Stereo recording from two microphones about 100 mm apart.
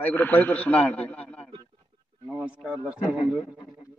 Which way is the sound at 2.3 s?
10° right (ahead or behind).